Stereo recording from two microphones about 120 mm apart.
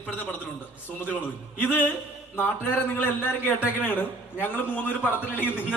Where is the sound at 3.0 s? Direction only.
15° left (ahead or behind).